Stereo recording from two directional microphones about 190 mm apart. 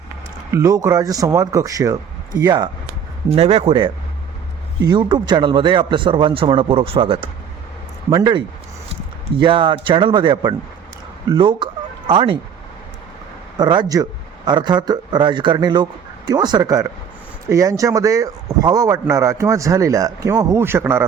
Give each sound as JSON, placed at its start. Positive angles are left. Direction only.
{"t": 0.5, "sound": "a man's voice", "side_deg": -15}
{"t": 3.2, "sound": "a man's voice", "side_deg": -30}
{"t": 13.6, "sound": "a man's voice", "side_deg": -20}